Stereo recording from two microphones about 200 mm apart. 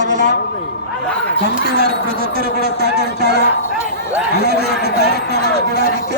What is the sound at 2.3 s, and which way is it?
A man's voice, 50° right (ahead or behind).